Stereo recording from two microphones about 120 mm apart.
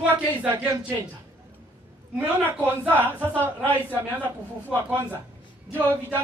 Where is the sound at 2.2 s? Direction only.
15° right (ahead or behind).